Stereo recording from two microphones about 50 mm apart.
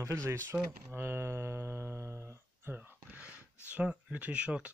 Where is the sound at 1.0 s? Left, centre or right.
Right.